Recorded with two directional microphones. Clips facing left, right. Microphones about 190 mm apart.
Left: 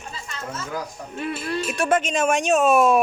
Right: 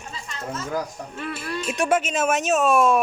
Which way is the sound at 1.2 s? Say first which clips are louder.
Left 4 dB; 20° left (ahead or behind).